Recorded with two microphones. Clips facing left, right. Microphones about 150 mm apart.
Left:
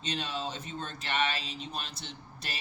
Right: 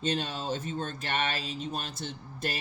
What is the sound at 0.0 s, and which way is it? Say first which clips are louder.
Speech: right 4 dB; 45° right (ahead or behind).